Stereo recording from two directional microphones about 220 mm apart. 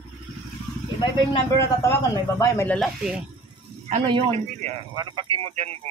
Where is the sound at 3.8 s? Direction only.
25° right (ahead or behind).